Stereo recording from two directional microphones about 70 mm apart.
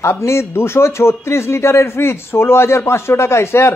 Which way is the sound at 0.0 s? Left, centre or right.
Left.